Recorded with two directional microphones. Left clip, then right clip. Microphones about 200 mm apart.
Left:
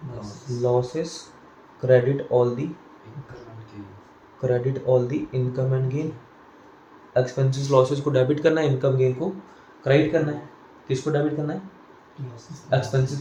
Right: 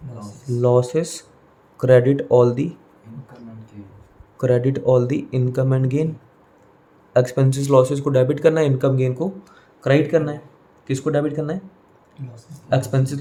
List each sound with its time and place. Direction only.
0.6 s speech: 50° right (ahead or behind)
4.4 s speech: 50° right (ahead or behind)
7.1 s speech: 50° right (ahead or behind)
12.7 s speech: 50° right (ahead or behind)